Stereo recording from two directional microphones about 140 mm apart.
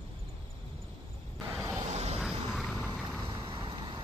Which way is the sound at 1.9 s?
50° right (ahead or behind).